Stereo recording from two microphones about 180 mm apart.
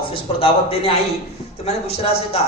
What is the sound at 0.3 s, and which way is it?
Speech, 30° left (ahead or behind).